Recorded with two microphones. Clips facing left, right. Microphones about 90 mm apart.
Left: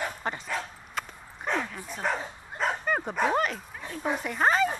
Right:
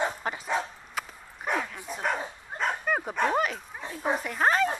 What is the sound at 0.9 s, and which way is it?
Dog, 5° right (ahead or behind).